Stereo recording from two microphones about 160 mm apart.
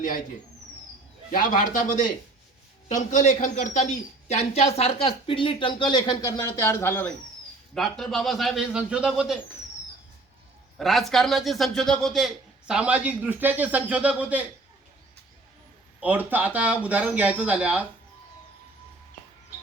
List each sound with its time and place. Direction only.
1.3 s a man's voice: 55° left (ahead or behind); by 7.1 s 15° left (ahead or behind)
7.7 s a man's voice: centre (ahead or behind)
10.8 s a man's voice: centre (ahead or behind)
16.0 s speech: 10° right (ahead or behind)